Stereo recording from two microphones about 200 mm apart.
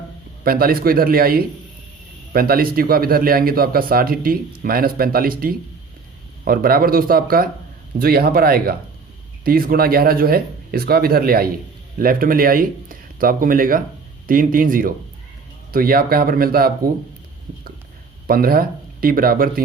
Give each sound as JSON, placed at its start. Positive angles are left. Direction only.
{"t": 0.4, "sound": "speech", "side_deg": -50}
{"t": 18.3, "sound": "speech", "side_deg": -45}